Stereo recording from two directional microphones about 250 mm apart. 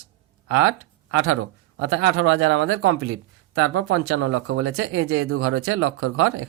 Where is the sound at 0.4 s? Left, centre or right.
Right.